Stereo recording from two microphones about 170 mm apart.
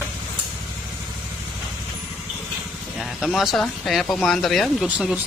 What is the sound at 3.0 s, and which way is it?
Speech, centre (ahead or behind).